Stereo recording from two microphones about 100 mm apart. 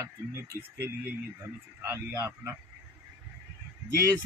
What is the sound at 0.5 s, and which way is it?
Speech, 20° right (ahead or behind).